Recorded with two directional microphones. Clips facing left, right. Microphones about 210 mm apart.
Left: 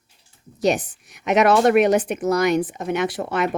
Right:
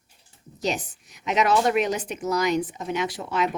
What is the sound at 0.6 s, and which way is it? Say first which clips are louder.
Speech: left 7 dB; 60° left (ahead or behind).